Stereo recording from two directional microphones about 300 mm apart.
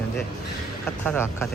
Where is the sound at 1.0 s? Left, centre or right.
Centre.